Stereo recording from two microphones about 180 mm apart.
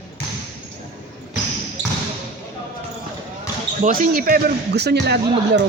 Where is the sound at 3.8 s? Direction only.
50° right (ahead or behind); by 5.5 s 65° right (ahead or behind).